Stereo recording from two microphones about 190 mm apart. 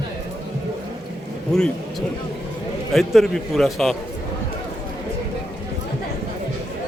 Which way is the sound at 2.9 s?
Centre (ahead or behind).